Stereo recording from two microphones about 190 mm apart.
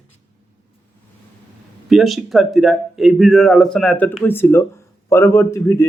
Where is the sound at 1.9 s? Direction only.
Centre (ahead or behind).